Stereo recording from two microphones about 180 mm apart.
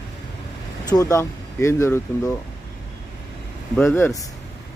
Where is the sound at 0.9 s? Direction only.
20° left (ahead or behind).